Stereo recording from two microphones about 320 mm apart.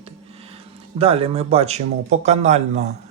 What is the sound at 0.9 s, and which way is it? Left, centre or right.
Speech, centre.